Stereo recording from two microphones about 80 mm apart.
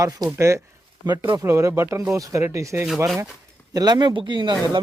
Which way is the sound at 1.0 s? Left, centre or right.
Right.